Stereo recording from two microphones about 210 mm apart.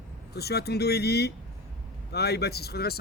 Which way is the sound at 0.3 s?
50° left (ahead or behind).